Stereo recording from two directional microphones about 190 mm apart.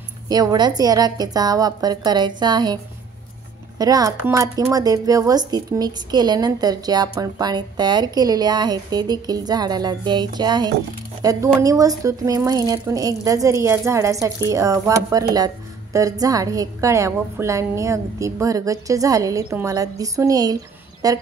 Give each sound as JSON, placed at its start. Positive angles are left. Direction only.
{"t": 0.3, "sound": "a woman's voice", "side_deg": -20}